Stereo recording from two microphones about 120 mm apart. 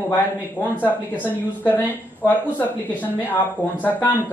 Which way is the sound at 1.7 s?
15° left (ahead or behind).